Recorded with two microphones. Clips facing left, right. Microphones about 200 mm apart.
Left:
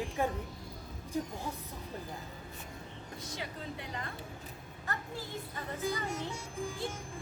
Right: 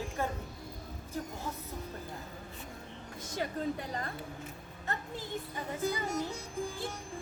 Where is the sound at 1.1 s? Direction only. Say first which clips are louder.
Left 3 dB; 15° left (ahead or behind).